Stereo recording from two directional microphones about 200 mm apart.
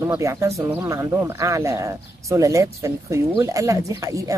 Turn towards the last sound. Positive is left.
turn(degrees=-15)  # may be behind; listen again after turning